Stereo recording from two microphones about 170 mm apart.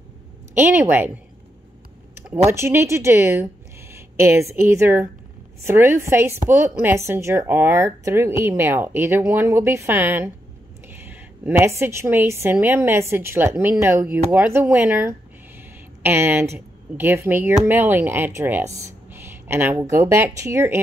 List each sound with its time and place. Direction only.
0.6 s speech: 10° right (ahead or behind)
2.2 s speech: 15° right (ahead or behind)